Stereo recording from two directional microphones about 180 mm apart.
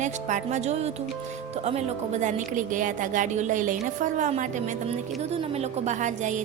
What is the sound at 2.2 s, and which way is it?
A woman's voice, 45° right (ahead or behind).